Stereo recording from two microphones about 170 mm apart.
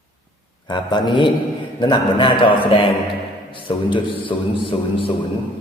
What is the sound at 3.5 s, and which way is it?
A man's voice, 30° left (ahead or behind).